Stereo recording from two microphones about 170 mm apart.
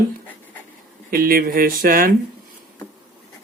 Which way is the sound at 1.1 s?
60° right (ahead or behind).